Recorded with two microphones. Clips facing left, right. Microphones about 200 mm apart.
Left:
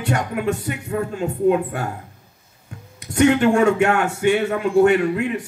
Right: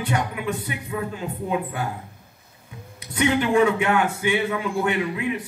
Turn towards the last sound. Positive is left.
turn(degrees=45)  # may be behind; listen again after turning